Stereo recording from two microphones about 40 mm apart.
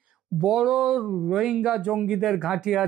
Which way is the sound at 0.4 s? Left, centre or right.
Centre.